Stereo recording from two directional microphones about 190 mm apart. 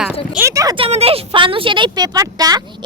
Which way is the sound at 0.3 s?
15° right (ahead or behind).